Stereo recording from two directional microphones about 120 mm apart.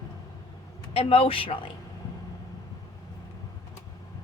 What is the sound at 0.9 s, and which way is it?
Speech, 55° left (ahead or behind).